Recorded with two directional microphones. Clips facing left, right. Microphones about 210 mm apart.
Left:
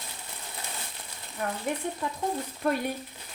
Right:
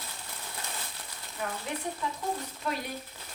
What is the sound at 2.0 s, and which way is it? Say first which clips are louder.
Speech: left 3 dB; 50° left (ahead or behind).